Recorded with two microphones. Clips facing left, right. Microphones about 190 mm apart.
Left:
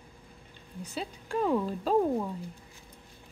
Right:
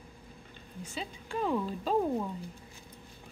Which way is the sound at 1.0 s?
5° left (ahead or behind).